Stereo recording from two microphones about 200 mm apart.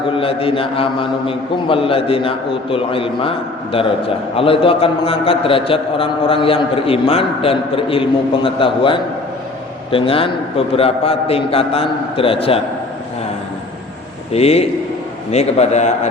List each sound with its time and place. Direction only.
0.2 s a man's voice: 25° left (ahead or behind)
14.3 s a man's voice: 30° left (ahead or behind)